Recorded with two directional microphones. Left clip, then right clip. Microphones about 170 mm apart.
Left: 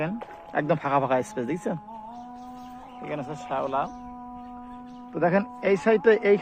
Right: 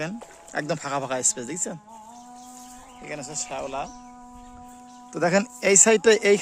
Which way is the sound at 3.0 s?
5° right (ahead or behind).